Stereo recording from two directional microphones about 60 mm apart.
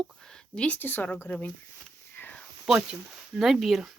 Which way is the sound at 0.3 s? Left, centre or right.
Centre.